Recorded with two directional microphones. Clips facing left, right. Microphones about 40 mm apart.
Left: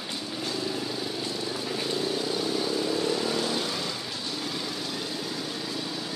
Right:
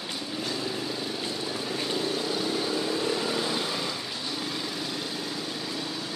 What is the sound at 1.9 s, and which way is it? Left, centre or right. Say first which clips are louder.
Vehicle: left 1 dB; centre.